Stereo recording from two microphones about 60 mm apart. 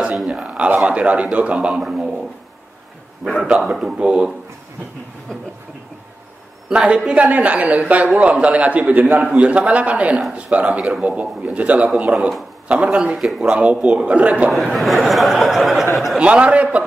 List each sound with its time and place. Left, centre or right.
0.3 s a man's voice: centre
1.8 s a man's voice: centre
3.5 s a man's voice: centre
6.7 s a man's voice: centre
14.5 s a sound: centre
16.2 s a man's voice: centre